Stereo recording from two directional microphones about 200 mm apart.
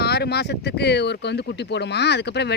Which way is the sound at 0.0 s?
55° left (ahead or behind).